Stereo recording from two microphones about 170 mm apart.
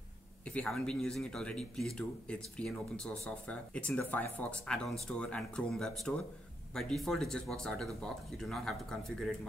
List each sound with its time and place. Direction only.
0.5 s speech: 5° left (ahead or behind)